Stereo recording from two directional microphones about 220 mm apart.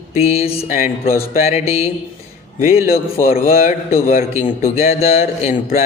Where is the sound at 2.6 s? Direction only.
35° left (ahead or behind).